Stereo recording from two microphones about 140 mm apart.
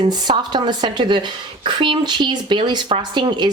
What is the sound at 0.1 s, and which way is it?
Speech, 30° right (ahead or behind).